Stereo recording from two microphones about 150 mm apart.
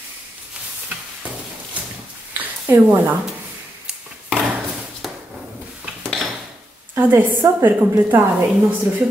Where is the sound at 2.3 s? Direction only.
15° right (ahead or behind).